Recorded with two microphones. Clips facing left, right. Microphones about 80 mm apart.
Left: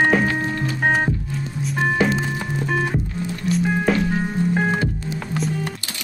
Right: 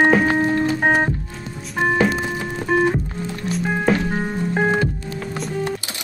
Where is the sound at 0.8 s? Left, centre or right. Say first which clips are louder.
Left 1 dB; centre.